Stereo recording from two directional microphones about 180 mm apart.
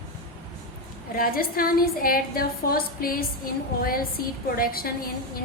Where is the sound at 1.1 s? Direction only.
55° left (ahead or behind).